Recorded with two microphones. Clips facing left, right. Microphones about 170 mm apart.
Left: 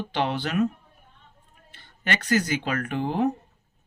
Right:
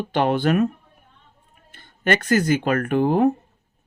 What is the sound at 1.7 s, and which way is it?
Speech, 50° right (ahead or behind).